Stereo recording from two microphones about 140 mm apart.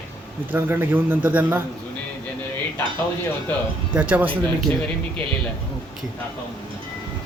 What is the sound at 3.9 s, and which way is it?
Speech, 10° right (ahead or behind).